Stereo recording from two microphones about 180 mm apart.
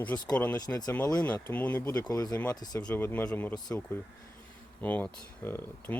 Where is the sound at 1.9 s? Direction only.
20° left (ahead or behind).